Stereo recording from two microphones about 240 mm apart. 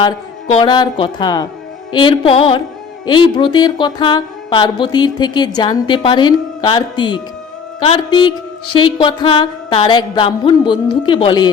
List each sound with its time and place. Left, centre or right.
0.0 s music: centre